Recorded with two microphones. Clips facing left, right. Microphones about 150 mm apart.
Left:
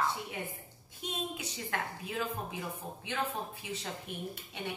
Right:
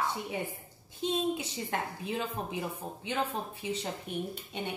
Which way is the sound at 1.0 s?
30° right (ahead or behind).